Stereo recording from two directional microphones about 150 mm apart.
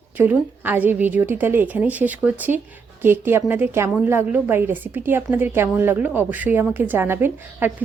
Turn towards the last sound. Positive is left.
turn(degrees=-15)  # may be behind; listen again after turning